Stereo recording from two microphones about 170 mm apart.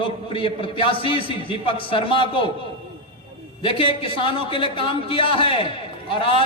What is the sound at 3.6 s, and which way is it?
A man's voice, 30° left (ahead or behind).